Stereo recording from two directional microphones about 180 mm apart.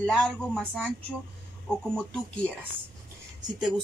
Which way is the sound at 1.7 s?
5° left (ahead or behind).